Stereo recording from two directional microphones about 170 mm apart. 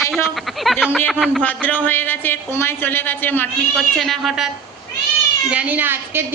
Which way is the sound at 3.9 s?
Centre (ahead or behind).